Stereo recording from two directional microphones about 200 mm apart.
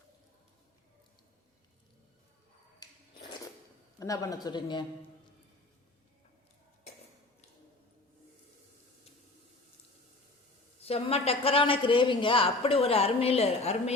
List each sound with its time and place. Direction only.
2.8 s a sound: 20° left (ahead or behind)
4.0 s a man's voice: 15° left (ahead or behind)
10.8 s a man's voice: 30° left (ahead or behind)